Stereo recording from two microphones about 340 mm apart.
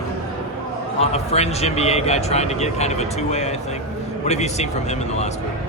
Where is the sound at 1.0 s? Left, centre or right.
Centre.